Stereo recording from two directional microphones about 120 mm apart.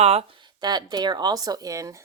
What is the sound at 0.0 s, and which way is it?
Speech, 60° right (ahead or behind).